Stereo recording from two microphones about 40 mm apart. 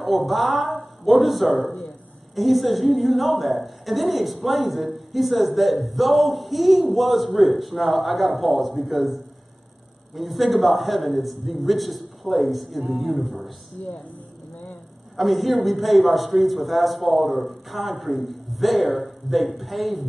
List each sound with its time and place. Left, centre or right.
0.0 s a man's voice: centre
13.8 s speech: left
15.1 s a man's voice: centre